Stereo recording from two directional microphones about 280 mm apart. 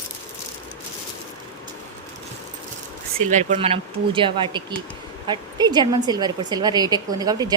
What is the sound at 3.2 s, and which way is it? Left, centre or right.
Speech, right.